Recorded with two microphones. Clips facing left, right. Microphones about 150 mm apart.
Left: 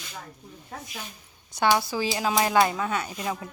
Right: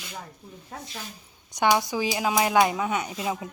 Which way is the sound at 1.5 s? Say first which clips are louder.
Right 1 dB; 15° right (ahead or behind).